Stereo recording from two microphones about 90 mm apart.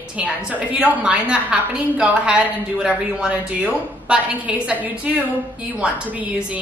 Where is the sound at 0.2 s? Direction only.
15° right (ahead or behind).